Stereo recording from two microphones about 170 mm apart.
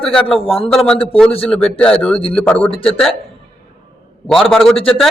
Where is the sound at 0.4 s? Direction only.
35° left (ahead or behind).